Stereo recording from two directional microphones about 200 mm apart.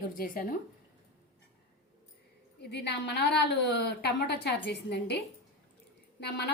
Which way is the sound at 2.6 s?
55° left (ahead or behind).